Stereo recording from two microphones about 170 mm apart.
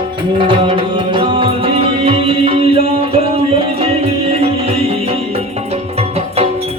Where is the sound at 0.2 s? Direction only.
30° right (ahead or behind).